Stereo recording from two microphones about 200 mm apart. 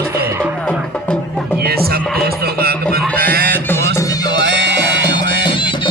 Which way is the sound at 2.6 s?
50° right (ahead or behind).